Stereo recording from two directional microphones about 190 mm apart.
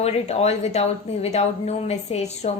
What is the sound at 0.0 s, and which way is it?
A woman's voice, 35° left (ahead or behind).